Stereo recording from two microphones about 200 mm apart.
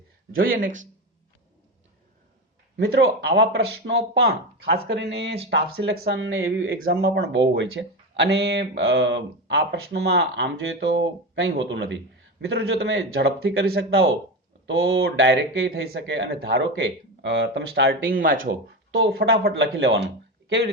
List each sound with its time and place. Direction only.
0.3 s speech: 45° right (ahead or behind)
2.8 s speech: 55° right (ahead or behind)
14.7 s speech: 55° right (ahead or behind)
18.9 s speech: 65° right (ahead or behind)